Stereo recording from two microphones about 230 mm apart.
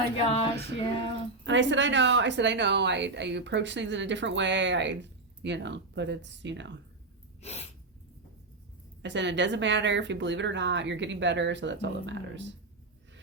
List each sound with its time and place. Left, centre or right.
0.3 s female singing: left
1.5 s a woman's voice: right
7.4 s sneeze: left
9.0 s a woman's voice: right